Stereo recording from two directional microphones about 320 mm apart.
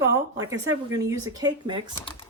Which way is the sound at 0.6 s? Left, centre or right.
Right.